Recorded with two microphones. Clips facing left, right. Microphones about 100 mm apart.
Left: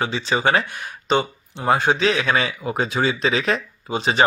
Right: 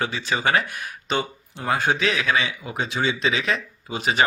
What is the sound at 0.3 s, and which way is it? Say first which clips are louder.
Speech: left 3 dB; 25° left (ahead or behind).